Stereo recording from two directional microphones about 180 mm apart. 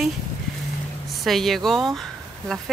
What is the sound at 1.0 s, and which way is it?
Speech, centre (ahead or behind).